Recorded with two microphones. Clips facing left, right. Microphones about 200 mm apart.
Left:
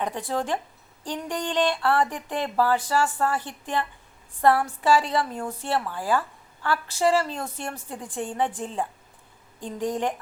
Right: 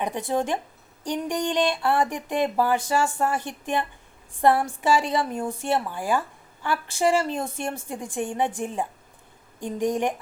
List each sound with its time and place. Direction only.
0.0 s a woman's voice: 20° right (ahead or behind)
8.1 s a woman's voice: 10° right (ahead or behind)